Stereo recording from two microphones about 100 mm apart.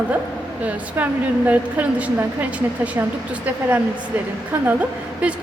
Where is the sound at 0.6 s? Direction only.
15° right (ahead or behind).